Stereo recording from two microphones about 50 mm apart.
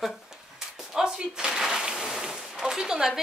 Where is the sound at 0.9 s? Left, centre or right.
Centre.